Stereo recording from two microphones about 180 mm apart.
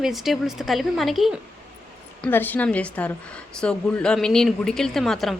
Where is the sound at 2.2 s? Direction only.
10° left (ahead or behind).